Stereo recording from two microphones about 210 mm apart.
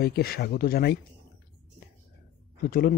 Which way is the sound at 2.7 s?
45° left (ahead or behind).